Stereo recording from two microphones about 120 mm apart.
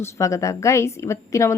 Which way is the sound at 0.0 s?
25° left (ahead or behind).